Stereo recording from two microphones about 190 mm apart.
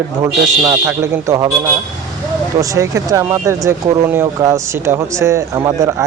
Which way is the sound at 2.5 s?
15° right (ahead or behind).